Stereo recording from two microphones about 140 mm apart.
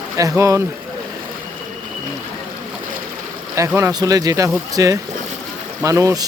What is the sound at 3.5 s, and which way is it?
Speech, 20° right (ahead or behind).